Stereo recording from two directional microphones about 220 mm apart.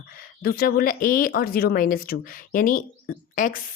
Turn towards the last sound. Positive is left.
turn(degrees=40)  # may be behind; listen again after turning